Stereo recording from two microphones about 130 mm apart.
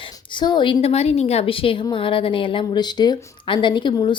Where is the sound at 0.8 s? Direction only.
55° left (ahead or behind).